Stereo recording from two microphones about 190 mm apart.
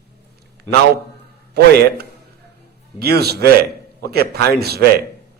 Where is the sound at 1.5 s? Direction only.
55° right (ahead or behind).